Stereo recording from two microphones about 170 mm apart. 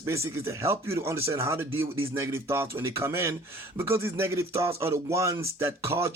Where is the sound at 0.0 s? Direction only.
15° right (ahead or behind).